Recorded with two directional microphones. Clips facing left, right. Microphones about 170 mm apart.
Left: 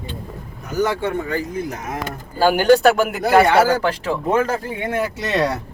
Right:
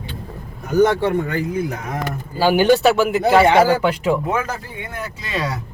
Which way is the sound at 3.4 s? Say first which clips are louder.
Right 2 dB; 15° right (ahead or behind).